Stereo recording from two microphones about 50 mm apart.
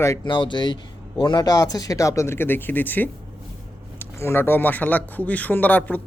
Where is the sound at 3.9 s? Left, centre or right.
Left.